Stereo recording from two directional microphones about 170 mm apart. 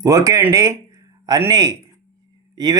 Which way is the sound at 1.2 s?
20° right (ahead or behind).